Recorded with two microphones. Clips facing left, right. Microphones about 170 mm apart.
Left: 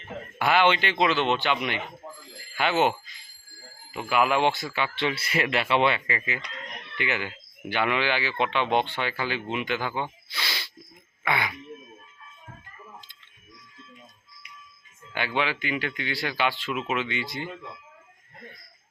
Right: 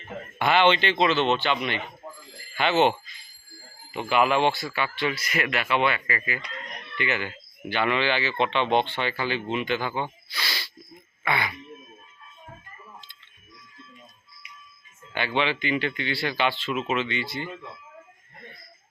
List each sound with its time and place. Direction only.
0.3 s speech: 5° left (ahead or behind)
3.9 s speech: 5° left (ahead or behind)
10.3 s a sound: 20° left (ahead or behind)
11.2 s speech: 15° left (ahead or behind)
15.4 s speech: 5° left (ahead or behind)